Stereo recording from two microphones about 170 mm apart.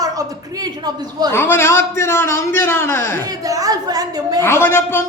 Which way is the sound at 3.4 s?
20° right (ahead or behind).